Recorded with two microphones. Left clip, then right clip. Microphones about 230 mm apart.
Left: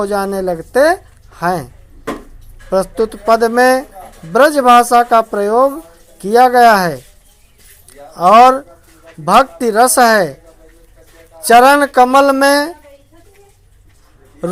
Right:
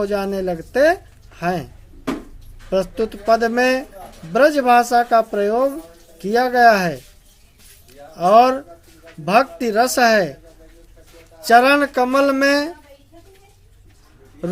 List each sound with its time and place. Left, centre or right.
0.0 s a woman's voice: centre
9.2 s speech: centre
11.4 s speech: centre